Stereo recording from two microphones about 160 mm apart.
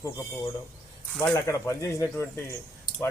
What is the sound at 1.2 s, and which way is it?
Speech, 15° left (ahead or behind).